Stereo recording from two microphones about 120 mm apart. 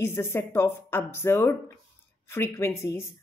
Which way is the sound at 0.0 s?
20° left (ahead or behind).